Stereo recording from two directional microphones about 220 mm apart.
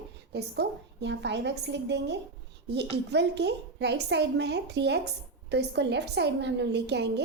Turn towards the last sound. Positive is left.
turn(degrees=-50)  # may be behind; listen again after turning